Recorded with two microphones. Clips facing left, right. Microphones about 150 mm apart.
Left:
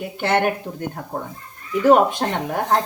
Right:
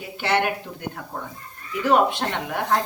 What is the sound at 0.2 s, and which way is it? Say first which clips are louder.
Speech: left 3 dB; 50° left (ahead or behind).